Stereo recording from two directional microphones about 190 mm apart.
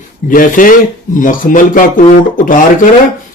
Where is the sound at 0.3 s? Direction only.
45° left (ahead or behind).